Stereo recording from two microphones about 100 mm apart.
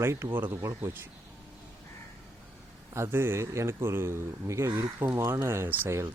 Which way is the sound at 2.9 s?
25° right (ahead or behind).